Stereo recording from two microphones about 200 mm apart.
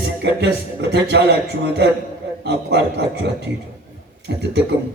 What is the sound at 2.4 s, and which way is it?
A man's voice, 60° right (ahead or behind).